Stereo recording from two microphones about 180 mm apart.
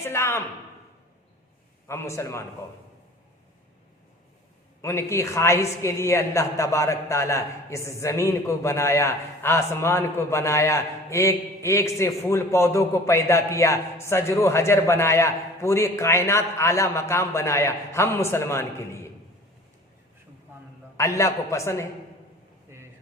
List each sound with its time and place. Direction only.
0.0 s a woman's voice: 15° left (ahead or behind)
1.9 s a woman's voice: 15° left (ahead or behind)
4.8 s a woman's voice: 15° left (ahead or behind)
20.9 s a woman's voice: 15° left (ahead or behind)